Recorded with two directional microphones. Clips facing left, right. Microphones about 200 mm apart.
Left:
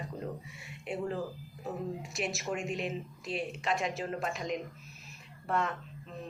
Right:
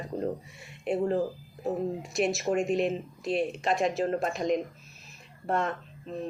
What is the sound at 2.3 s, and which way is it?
A woman's voice, 40° right (ahead or behind).